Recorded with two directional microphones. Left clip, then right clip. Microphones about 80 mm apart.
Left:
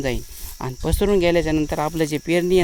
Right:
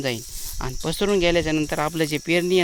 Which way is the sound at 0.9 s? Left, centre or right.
Left.